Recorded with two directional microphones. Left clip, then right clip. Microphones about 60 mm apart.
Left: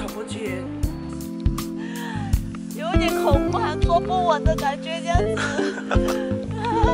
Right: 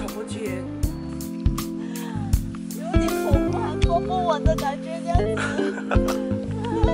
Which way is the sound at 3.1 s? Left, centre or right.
Centre.